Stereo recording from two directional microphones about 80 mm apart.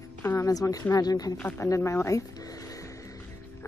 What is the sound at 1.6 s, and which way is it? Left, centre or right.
Speech, left.